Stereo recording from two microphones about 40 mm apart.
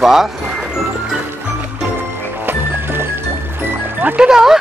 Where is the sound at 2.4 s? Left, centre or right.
Right.